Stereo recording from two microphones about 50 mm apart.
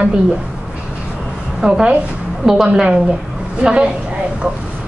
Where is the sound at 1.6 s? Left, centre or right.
Centre.